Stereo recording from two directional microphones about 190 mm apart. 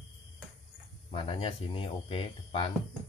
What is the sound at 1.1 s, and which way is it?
Speech, 30° left (ahead or behind).